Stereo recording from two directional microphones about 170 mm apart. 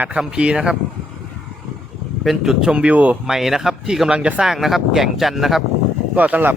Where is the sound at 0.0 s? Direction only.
5° right (ahead or behind).